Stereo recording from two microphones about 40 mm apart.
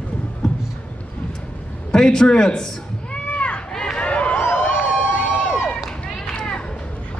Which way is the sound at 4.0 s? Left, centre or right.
Left.